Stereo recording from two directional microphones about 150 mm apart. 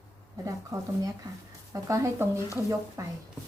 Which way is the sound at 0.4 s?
25° right (ahead or behind).